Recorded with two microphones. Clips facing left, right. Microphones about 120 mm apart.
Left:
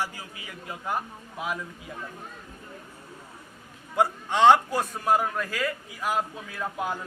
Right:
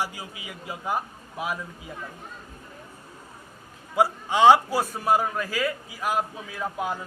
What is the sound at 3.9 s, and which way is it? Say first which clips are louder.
A man's voice: right 2 dB; 5° right (ahead or behind).